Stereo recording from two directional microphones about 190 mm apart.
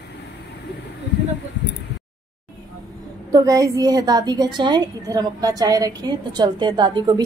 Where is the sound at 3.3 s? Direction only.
15° right (ahead or behind).